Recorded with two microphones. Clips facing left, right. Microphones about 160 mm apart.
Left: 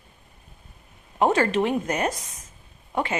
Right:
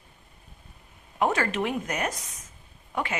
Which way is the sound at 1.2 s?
30° left (ahead or behind).